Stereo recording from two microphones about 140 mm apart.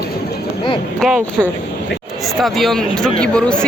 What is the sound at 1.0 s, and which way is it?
Speech, centre (ahead or behind).